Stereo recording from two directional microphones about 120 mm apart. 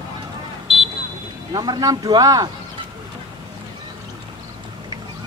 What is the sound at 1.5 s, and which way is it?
Speech, 35° right (ahead or behind).